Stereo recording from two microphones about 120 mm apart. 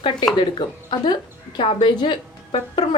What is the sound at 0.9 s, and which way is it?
A woman's voice, 40° left (ahead or behind).